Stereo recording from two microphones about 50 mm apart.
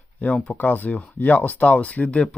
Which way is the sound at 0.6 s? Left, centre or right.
Left.